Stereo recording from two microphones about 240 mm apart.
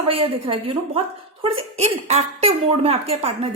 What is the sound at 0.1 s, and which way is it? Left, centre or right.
A woman's voice, right.